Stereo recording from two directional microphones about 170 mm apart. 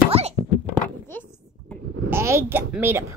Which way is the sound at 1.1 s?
10° left (ahead or behind).